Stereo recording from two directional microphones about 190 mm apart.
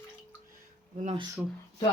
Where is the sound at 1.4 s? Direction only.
10° right (ahead or behind).